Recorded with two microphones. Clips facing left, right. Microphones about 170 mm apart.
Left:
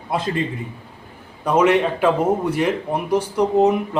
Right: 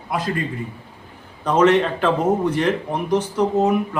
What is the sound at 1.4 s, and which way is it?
A man's voice, 10° left (ahead or behind).